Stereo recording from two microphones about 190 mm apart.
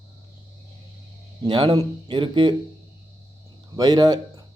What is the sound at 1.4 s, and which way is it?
A man's voice, 25° right (ahead or behind).